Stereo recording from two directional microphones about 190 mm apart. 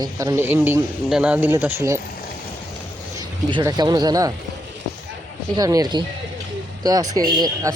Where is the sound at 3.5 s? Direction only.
25° right (ahead or behind).